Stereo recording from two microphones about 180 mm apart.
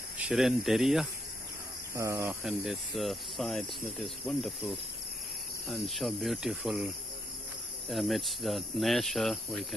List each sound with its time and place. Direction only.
0.2 s speech: centre (ahead or behind)
2.0 s speech: 15° right (ahead or behind)
2.4 s speech: centre (ahead or behind)
7.9 s speech: centre (ahead or behind)